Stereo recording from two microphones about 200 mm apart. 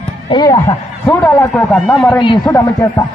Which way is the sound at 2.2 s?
20° left (ahead or behind).